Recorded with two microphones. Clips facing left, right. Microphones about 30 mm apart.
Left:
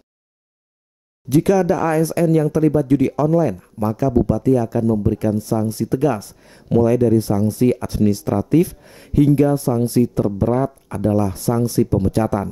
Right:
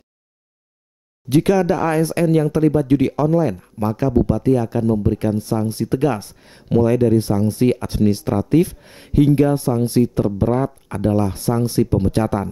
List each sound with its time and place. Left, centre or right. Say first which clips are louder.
1.3 s speech: even; right
3.8 s speech: even; right